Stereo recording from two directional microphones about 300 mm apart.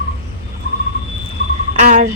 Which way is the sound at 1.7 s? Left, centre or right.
Right.